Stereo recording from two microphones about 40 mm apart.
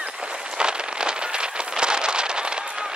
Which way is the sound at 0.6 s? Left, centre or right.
Right.